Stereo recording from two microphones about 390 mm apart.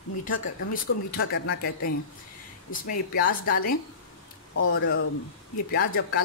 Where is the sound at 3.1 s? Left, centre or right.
Left.